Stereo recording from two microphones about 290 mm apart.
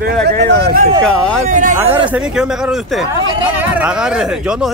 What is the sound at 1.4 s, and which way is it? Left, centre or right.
Speech, right.